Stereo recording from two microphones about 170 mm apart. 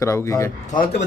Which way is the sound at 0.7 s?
60° left (ahead or behind).